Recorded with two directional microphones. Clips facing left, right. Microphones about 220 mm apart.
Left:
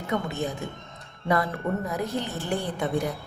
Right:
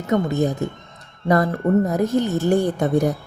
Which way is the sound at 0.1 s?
40° right (ahead or behind).